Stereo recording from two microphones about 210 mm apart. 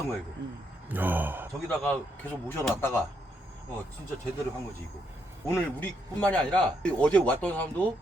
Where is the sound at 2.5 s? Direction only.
10° left (ahead or behind).